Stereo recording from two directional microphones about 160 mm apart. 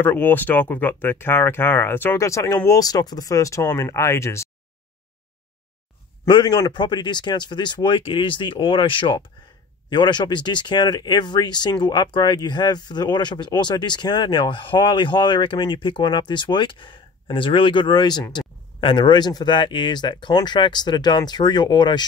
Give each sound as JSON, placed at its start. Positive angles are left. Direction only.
{"t": 0.0, "sound": "speech", "side_deg": 10}
{"t": 6.2, "sound": "speech", "side_deg": 30}